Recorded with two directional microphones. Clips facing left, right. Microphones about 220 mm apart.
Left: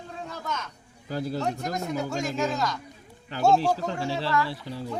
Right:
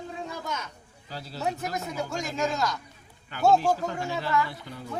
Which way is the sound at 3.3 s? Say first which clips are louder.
Left 1 dB; 35° left (ahead or behind).